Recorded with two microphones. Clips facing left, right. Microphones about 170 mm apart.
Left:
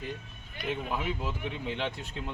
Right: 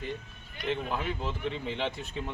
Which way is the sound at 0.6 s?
10° left (ahead or behind).